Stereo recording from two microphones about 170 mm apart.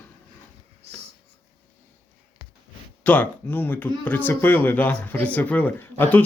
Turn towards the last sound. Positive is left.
turn(degrees=10)  # may be behind; listen again after turning